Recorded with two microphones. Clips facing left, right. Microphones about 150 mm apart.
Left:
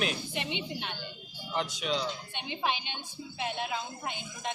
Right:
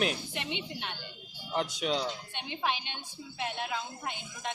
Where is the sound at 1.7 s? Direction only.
45° right (ahead or behind).